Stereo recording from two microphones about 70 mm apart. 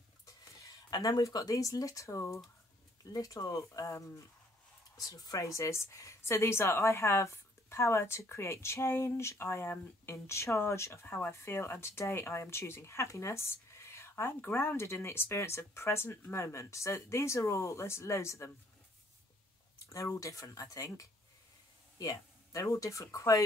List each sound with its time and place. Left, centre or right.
0.8 s speech: left
1.2 s speech: left
3.1 s speech: left
4.9 s speech: left
20.2 s speech: left